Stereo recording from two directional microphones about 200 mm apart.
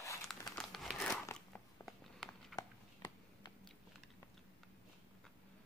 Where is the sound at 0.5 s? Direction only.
Centre (ahead or behind).